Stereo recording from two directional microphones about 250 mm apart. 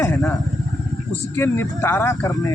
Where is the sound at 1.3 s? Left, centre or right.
Centre.